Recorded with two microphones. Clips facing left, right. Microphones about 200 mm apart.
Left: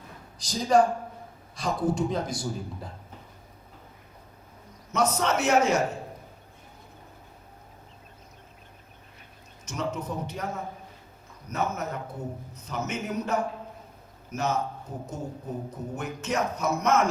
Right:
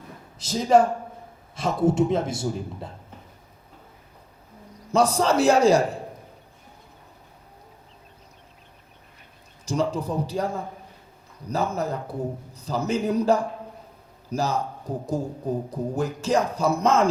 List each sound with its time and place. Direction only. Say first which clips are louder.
0.3 s a man's voice: right 3 dB; 25° right (ahead or behind)
4.9 s a man's voice: right 5 dB; 30° right (ahead or behind)
9.6 s a man's voice: right 7 dB; 35° right (ahead or behind)